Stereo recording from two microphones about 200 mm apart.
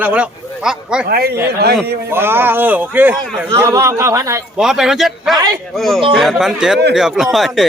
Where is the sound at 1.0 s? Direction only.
50° right (ahead or behind).